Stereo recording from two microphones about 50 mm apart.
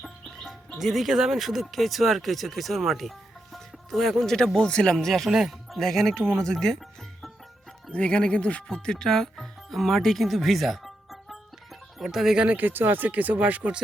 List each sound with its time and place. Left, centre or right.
0.0 s music: centre
0.9 s speech: centre
5.0 s speech: centre
5.3 s speech: centre
5.7 s speech: centre
7.9 s speech: left; by 12.4 s centre
12.4 s speech: right